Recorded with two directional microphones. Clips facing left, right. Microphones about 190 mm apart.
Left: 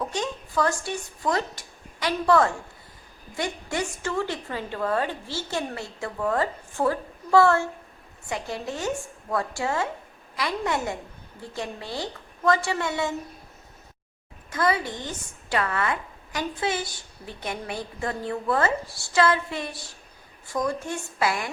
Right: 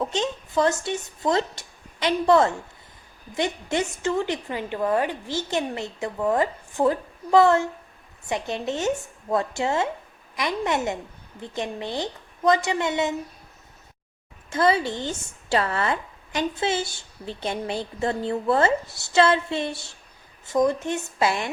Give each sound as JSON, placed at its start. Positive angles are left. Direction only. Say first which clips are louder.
{"t": 0.0, "sound": "a woman's voice", "louder": "right 3 dB", "side_deg": -20}
{"t": 14.5, "sound": "speech", "louder": "right 4 dB", "side_deg": -25}